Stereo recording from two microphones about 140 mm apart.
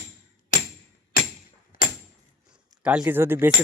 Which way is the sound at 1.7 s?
80° left.